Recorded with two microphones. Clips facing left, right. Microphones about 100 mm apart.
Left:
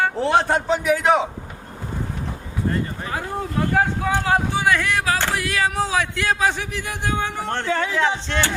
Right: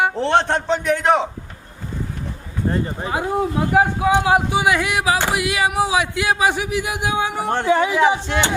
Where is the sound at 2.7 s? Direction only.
15° right (ahead or behind).